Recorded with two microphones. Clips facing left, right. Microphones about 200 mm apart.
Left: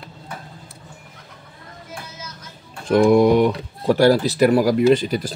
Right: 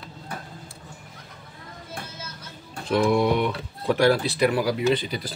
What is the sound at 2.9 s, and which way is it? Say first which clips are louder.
Speech: left 7 dB; 45° left (ahead or behind).